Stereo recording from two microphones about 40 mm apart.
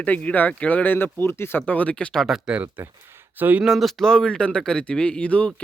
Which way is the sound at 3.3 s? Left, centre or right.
Right.